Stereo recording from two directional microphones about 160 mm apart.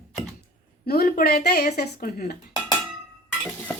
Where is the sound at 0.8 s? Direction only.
70° left (ahead or behind).